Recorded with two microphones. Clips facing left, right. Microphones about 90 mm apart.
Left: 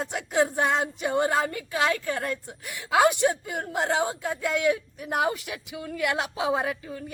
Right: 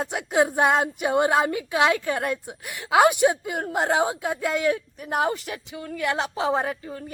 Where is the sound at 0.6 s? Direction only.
60° right (ahead or behind).